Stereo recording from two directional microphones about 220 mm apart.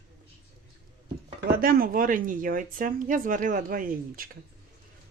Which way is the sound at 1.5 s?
40° right (ahead or behind).